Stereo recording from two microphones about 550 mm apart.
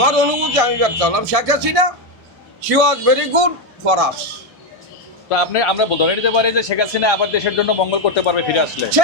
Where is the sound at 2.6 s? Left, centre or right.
Right.